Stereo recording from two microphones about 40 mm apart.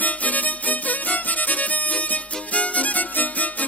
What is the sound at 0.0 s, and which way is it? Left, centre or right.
Music, left.